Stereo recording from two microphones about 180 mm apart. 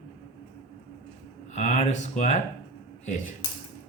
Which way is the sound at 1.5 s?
40° left (ahead or behind).